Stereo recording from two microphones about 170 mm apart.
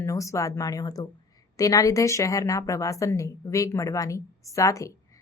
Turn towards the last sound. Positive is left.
turn(degrees=20)  # may be behind; listen again after turning